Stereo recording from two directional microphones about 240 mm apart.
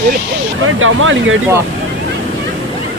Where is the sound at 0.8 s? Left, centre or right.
Right.